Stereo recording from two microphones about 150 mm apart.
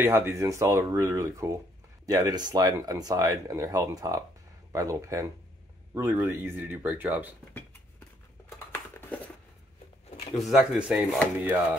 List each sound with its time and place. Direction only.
0.0 s speech: 15° right (ahead or behind)
8.5 s a sound: 15° left (ahead or behind)
10.3 s speech: centre (ahead or behind)